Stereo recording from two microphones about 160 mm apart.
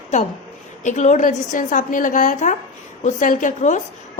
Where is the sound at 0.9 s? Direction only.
50° left (ahead or behind).